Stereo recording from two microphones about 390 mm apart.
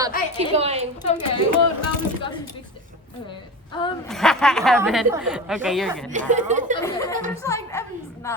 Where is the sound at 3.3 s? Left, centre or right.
Centre.